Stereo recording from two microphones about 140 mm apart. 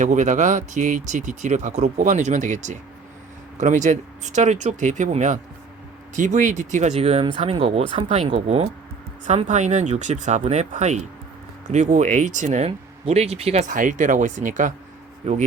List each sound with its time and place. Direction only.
0.0 s speech: 60° right (ahead or behind)
13.7 s speech: 65° right (ahead or behind)
15.2 s speech: 50° right (ahead or behind)